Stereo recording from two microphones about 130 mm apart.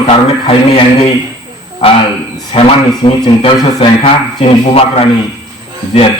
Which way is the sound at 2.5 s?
45° left (ahead or behind).